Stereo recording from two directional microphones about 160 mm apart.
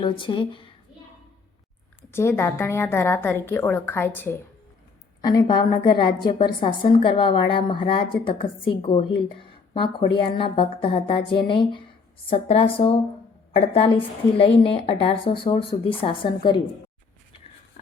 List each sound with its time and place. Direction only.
0.0 s a woman's voice: 30° left (ahead or behind)
2.1 s a woman's voice: 15° left (ahead or behind)
5.2 s a woman's voice: 25° left (ahead or behind)